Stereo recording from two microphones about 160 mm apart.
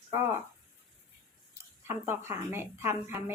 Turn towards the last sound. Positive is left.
turn(degrees=-15)  # may be behind; listen again after turning